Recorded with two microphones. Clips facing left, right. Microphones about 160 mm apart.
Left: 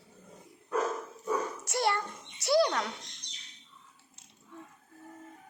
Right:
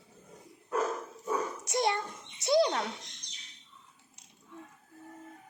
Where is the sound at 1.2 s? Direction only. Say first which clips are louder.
Left 1 dB; 20° right (ahead or behind).